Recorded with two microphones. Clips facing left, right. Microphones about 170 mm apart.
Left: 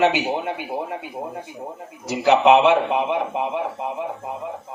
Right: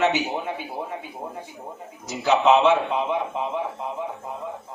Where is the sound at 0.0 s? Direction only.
65° left (ahead or behind).